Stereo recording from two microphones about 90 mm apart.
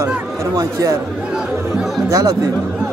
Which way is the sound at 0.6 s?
35° right (ahead or behind).